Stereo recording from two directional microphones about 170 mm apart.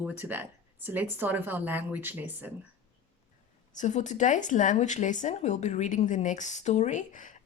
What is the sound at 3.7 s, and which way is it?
Speech, 45° left (ahead or behind).